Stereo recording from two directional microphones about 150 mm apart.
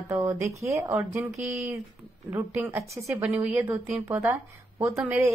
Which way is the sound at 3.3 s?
10° right (ahead or behind).